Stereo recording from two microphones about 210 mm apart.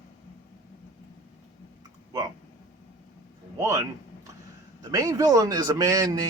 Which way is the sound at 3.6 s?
15° right (ahead or behind).